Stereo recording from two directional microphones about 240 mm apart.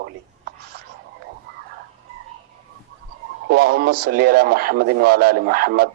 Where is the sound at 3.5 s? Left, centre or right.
Right.